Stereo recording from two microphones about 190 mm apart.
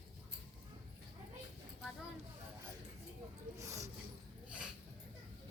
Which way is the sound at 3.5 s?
15° right (ahead or behind).